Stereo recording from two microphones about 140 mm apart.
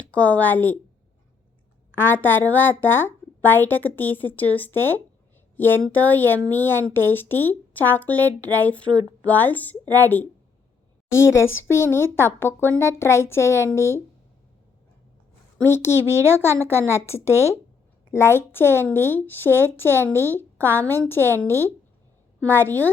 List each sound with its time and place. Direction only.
0.0 s a woman's voice: 10° left (ahead or behind)
2.0 s a woman's voice: 15° left (ahead or behind)
15.5 s a woman's voice: 15° left (ahead or behind)
18.1 s a woman's voice: 20° left (ahead or behind)